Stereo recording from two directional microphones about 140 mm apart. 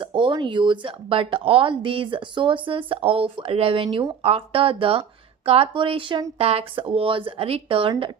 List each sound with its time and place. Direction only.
0.0 s speech: 35° right (ahead or behind)